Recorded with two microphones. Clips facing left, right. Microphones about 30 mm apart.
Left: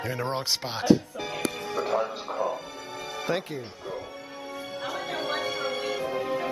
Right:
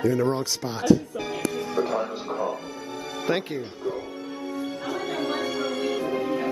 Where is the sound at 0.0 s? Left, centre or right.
Left.